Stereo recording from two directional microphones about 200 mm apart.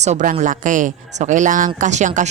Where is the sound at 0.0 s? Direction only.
35° right (ahead or behind).